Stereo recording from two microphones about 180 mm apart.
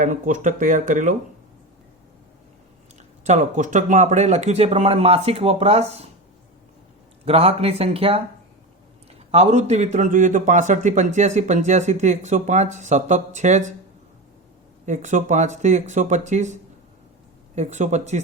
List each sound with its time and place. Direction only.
0.0 s speech: 45° right (ahead or behind)
3.2 s a man's voice: 40° right (ahead or behind)
7.3 s a man's voice: 35° right (ahead or behind)
14.8 s a man's voice: 40° right (ahead or behind)